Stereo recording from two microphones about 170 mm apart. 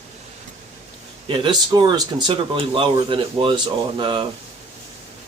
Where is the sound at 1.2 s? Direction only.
30° right (ahead or behind).